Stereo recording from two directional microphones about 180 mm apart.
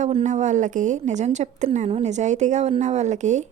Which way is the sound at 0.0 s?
40° right (ahead or behind).